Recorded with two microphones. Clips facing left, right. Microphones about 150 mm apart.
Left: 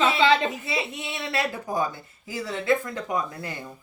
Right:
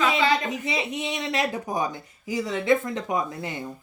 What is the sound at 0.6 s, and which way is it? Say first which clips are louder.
Speech: right 2 dB; 20° right (ahead or behind).